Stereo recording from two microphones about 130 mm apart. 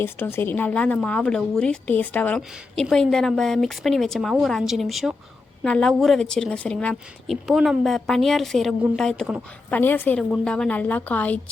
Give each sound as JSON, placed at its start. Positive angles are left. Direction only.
{"t": 0.0, "sound": "a woman's voice", "side_deg": 15}
{"t": 9.6, "sound": "speech", "side_deg": 15}